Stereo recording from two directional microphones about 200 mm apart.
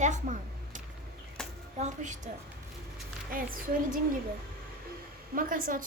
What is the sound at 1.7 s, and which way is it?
Speech, 35° right (ahead or behind).